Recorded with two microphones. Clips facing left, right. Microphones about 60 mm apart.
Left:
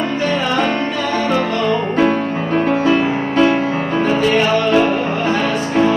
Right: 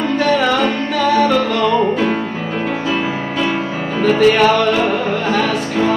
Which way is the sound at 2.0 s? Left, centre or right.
Left.